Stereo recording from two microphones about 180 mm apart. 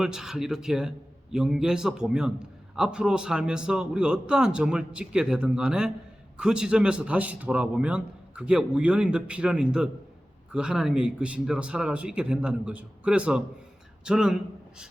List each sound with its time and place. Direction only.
0.0 s a man's voice: 5° right (ahead or behind)